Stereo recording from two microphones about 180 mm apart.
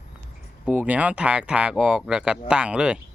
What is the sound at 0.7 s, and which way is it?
Speech, 10° right (ahead or behind).